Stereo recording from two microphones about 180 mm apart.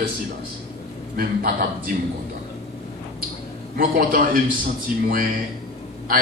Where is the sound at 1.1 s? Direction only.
50° right (ahead or behind).